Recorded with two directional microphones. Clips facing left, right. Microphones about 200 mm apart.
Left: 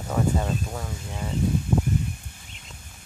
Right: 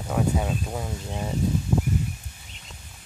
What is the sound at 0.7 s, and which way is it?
Speech, 20° right (ahead or behind).